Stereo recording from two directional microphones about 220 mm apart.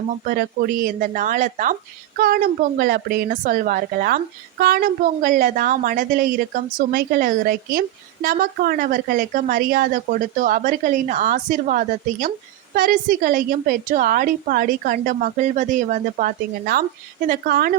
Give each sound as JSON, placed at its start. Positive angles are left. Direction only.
{"t": 0.3, "sound": "a woman's voice", "side_deg": -40}